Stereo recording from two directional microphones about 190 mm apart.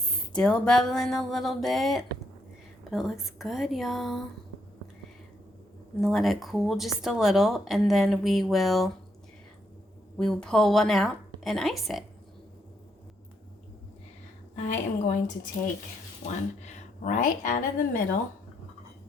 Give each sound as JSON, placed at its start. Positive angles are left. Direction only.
{"t": 0.3, "sound": "speech", "side_deg": 5}
{"t": 6.0, "sound": "speech", "side_deg": 0}
{"t": 10.2, "sound": "speech", "side_deg": 5}
{"t": 14.5, "sound": "a woman's voice", "side_deg": 40}
{"t": 16.2, "sound": "speech", "side_deg": 40}